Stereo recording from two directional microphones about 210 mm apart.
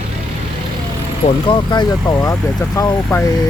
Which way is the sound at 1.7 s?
15° left (ahead or behind).